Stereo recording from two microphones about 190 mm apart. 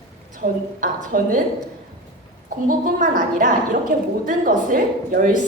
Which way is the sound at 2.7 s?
45° right (ahead or behind).